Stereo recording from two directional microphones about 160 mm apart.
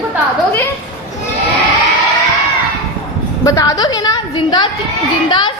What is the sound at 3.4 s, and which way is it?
A woman's voice, 20° left (ahead or behind).